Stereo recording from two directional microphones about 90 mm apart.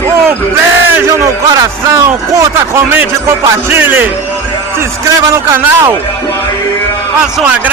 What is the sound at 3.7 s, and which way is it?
Speech, 25° right (ahead or behind).